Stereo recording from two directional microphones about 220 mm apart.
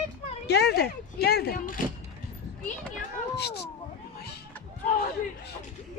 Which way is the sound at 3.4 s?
45° left (ahead or behind).